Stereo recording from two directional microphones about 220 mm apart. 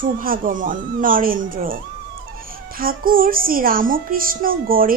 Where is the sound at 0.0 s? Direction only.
40° right (ahead or behind).